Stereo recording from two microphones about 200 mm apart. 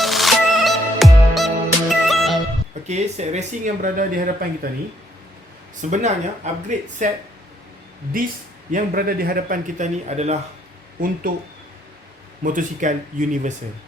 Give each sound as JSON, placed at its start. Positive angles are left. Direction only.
{"t": 0.0, "sound": "music", "side_deg": 0}
{"t": 2.8, "sound": "speech", "side_deg": -35}
{"t": 5.8, "sound": "speech", "side_deg": -35}
{"t": 8.7, "sound": "speech", "side_deg": -45}
{"t": 11.3, "sound": "speech", "side_deg": -45}